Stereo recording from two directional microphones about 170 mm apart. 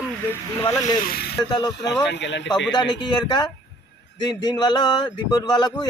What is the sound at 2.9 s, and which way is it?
Speech, 25° left (ahead or behind).